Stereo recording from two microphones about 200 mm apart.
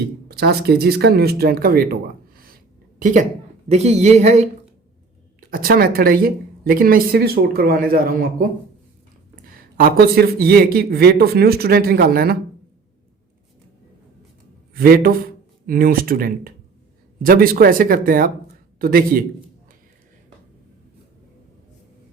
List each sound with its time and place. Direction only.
0.3 s a woman's voice: 55° right (ahead or behind); by 4.4 s 35° right (ahead or behind)
5.4 s a woman's voice: 45° right (ahead or behind)
9.6 s a woman's voice: 45° right (ahead or behind)
14.7 s a man's voice: 45° right (ahead or behind)